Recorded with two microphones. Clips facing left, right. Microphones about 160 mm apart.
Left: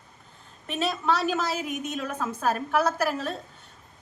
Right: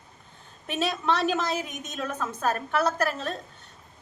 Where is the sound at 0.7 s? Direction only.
Centre (ahead or behind).